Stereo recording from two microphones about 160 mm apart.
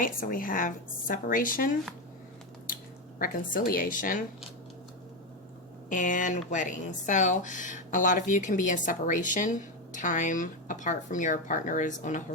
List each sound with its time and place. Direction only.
0.0 s a woman's voice: 60° left (ahead or behind)
3.2 s a woman's voice: 60° left (ahead or behind)
5.9 s a woman's voice: 55° left (ahead or behind)